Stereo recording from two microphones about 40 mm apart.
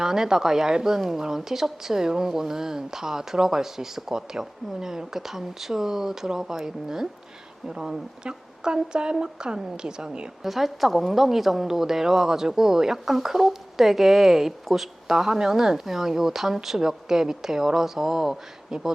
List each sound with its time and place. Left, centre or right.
0.0 s a woman's voice: centre
10.4 s a woman's voice: centre